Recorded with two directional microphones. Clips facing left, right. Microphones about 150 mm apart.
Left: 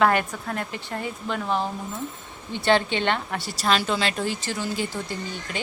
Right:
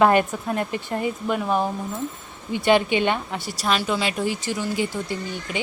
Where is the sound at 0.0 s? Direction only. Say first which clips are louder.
Right 4 dB; 20° right (ahead or behind).